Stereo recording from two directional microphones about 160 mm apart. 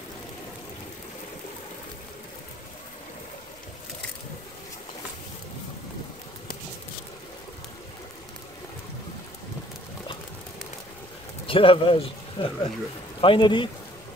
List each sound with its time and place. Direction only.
11.4 s speech: 35° left (ahead or behind)